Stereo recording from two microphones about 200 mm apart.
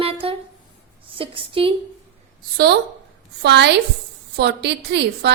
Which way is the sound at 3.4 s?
60° right (ahead or behind).